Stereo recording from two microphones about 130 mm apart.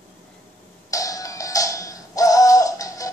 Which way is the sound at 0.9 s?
25° left (ahead or behind).